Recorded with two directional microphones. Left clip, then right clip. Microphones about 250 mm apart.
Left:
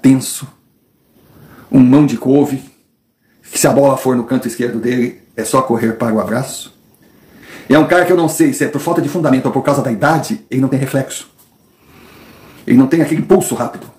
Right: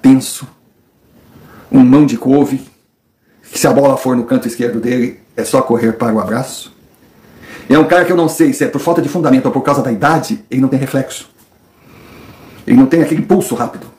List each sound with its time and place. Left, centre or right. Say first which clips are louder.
0.0 s a sound: right 2 dB; centre
1.7 s speech: right 2 dB; centre
3.4 s speech: right 1 dB; centre
12.6 s speech: right 2 dB; centre